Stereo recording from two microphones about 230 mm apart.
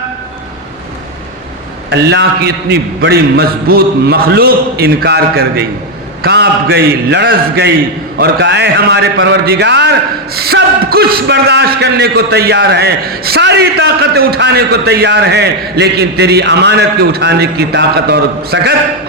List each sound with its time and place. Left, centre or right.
1.9 s a man's voice: right